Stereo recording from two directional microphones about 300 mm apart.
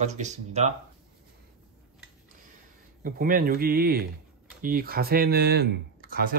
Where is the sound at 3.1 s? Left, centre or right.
Right.